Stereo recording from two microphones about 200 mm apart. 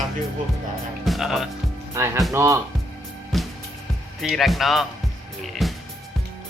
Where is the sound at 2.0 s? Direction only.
15° right (ahead or behind).